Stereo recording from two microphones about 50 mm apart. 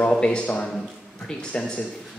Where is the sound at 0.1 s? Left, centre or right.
Centre.